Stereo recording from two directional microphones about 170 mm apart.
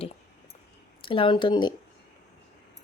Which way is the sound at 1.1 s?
30° left (ahead or behind).